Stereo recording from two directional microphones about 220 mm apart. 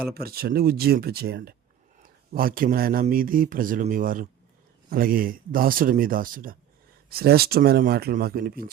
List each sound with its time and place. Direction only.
0.1 s speech: 45° right (ahead or behind)